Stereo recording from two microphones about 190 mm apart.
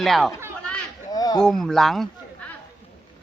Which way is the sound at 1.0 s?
20° left (ahead or behind).